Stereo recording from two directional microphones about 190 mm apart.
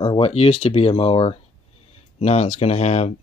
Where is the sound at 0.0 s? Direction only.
30° left (ahead or behind).